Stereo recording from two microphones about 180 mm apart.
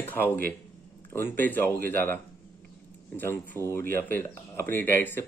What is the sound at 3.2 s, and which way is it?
Speech, 15° left (ahead or behind).